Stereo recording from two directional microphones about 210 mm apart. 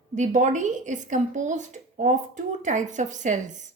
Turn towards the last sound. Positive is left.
turn(degrees=-35)  # may be behind; listen again after turning